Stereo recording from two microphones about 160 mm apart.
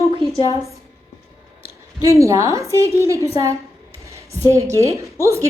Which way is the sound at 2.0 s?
20° right (ahead or behind).